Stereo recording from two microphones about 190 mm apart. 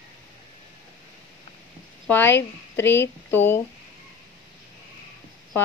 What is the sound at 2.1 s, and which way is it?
Speech, 10° left (ahead or behind).